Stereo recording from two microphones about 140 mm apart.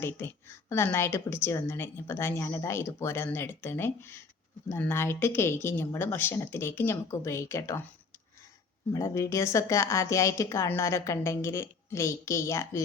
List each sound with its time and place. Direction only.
0.0 s a woman's voice: 15° left (ahead or behind)
8.9 s a woman's voice: 20° left (ahead or behind)